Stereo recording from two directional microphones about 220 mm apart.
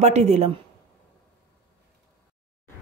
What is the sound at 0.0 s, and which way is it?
Speech, 30° right (ahead or behind).